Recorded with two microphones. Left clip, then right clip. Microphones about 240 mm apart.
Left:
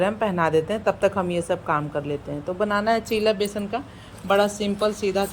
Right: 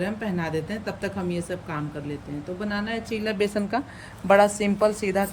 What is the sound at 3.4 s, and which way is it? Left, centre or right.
Speech, right.